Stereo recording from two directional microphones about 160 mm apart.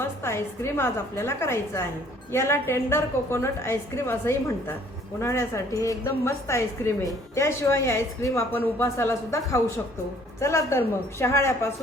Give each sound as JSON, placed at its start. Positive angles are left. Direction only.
{"t": 0.0, "sound": "speech", "side_deg": 15}